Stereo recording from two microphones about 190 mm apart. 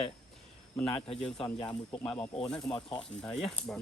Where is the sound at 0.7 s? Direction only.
5° left (ahead or behind).